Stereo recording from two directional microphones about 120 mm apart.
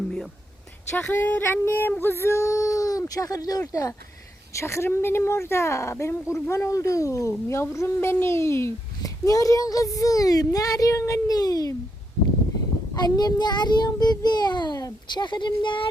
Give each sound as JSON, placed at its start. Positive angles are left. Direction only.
{"t": 0.9, "sound": "speech", "side_deg": 15}
{"t": 12.9, "sound": "a child's voice", "side_deg": 30}